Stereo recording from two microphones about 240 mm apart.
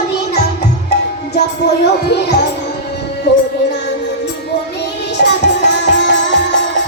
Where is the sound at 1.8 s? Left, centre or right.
Left.